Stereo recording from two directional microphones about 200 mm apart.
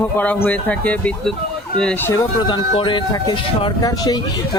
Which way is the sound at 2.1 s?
20° left (ahead or behind).